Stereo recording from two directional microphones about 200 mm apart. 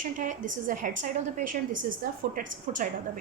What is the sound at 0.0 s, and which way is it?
A woman's voice, 40° right (ahead or behind).